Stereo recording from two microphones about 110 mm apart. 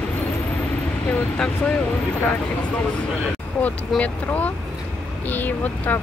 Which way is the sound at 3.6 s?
15° left (ahead or behind).